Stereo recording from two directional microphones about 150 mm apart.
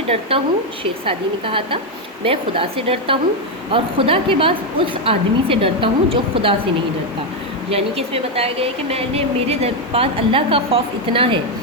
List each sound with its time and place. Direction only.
0.1 s speech: 40° right (ahead or behind)
7.7 s speech: 40° right (ahead or behind)